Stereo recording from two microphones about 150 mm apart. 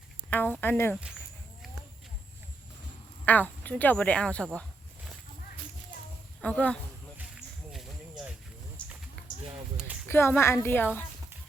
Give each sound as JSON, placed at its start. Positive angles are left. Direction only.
{"t": 0.3, "sound": "speech", "side_deg": 10}
{"t": 3.2, "sound": "speech", "side_deg": 10}
{"t": 6.4, "sound": "speech", "side_deg": 10}
{"t": 7.7, "sound": "a sound", "side_deg": 0}
{"t": 9.7, "sound": "a sound", "side_deg": -10}
{"t": 10.1, "sound": "speech", "side_deg": 15}